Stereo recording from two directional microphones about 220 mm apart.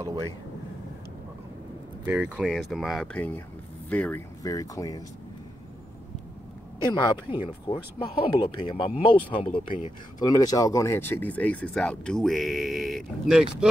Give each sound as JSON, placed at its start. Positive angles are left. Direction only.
{"t": 2.0, "sound": "speech", "side_deg": -5}
{"t": 6.8, "sound": "speech", "side_deg": 20}